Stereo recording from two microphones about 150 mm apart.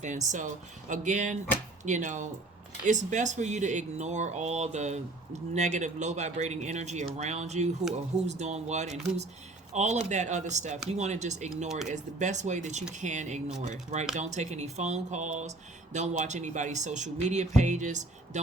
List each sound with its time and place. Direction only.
0.0 s speech: 55° right (ahead or behind)